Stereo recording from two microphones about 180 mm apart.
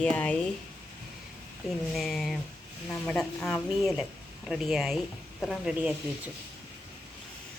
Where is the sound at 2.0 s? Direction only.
Centre (ahead or behind).